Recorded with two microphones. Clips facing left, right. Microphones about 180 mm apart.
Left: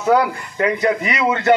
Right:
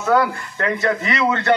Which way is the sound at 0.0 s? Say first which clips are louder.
Left 2 dB; 20° left (ahead or behind).